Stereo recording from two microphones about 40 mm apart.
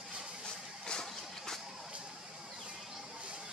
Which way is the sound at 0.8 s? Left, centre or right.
Centre.